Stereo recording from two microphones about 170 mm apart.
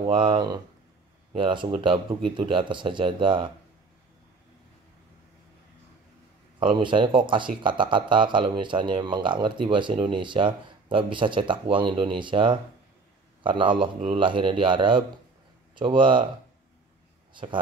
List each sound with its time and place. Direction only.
0.0 s speech: 30° right (ahead or behind)
6.6 s speech: 30° right (ahead or behind)
17.3 s speech: 30° right (ahead or behind)